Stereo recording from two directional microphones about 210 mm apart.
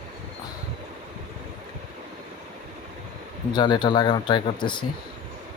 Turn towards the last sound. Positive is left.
turn(degrees=20)  # may be behind; listen again after turning